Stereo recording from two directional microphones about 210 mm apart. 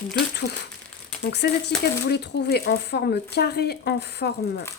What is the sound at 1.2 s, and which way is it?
Speech, 55° left (ahead or behind).